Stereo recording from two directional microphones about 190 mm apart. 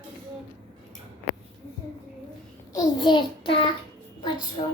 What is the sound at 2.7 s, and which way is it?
Speech, 20° left (ahead or behind).